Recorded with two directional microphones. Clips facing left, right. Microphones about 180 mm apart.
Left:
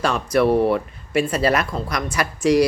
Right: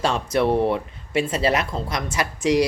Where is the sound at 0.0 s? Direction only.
25° right (ahead or behind).